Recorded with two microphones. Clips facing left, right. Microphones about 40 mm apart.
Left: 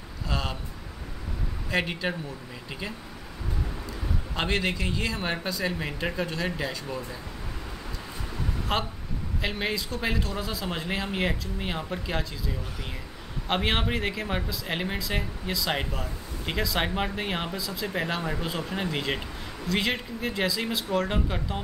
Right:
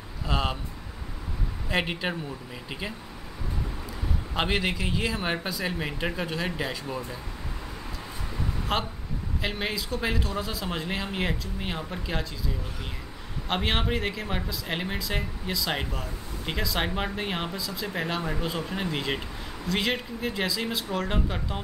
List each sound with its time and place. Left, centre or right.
0.3 s speech: centre
1.7 s speech: centre
4.4 s speech: centre
8.7 s speech: centre
13.5 s speech: centre